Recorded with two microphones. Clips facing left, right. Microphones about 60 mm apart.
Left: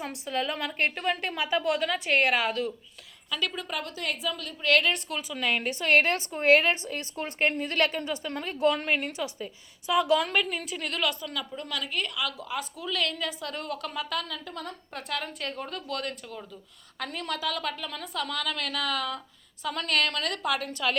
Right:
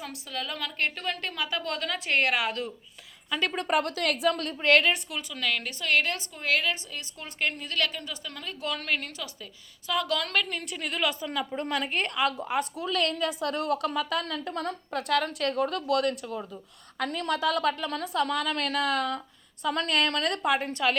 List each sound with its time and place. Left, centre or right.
0.0 s a woman's voice: left; by 2.7 s centre
3.6 s a woman's voice: right
4.8 s a woman's voice: centre
5.3 s a woman's voice: left; by 11.0 s centre
11.0 s a woman's voice: right
12.8 s a woman's voice: right
16.2 s a woman's voice: right
17.0 s a woman's voice: right
20.6 s a woman's voice: right